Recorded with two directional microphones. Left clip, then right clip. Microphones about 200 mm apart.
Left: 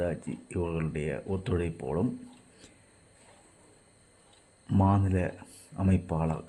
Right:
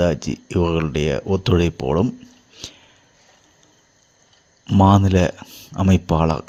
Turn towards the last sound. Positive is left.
turn(degrees=-30)  # may be behind; listen again after turning